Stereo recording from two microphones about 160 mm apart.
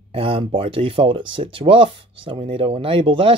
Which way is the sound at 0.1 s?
35° right (ahead or behind).